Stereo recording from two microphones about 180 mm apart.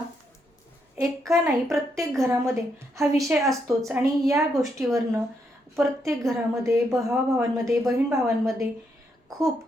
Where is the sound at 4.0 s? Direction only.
15° right (ahead or behind).